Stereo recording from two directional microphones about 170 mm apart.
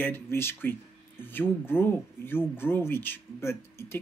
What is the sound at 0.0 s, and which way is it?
Speech, 15° left (ahead or behind).